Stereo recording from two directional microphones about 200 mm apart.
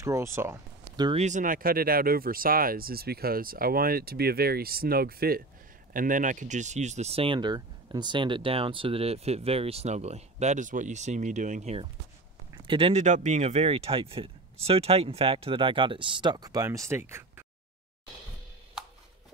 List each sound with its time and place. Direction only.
0.0 s speech: 15° right (ahead or behind)
1.2 s speech: 40° right (ahead or behind); by 17.5 s 10° right (ahead or behind)